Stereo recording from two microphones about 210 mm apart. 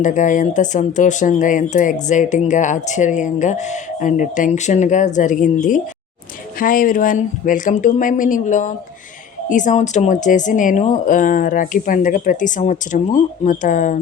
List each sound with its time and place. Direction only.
0.0 s speech: 35° left (ahead or behind)